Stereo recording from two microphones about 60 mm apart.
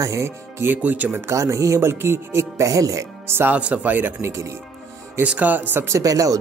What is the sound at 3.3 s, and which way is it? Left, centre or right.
Speech, right.